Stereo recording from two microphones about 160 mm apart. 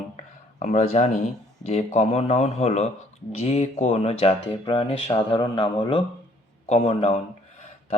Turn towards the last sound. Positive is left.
turn(degrees=40)  # may be behind; listen again after turning